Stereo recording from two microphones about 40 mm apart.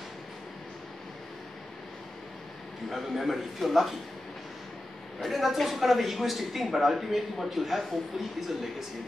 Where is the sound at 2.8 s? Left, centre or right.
Centre.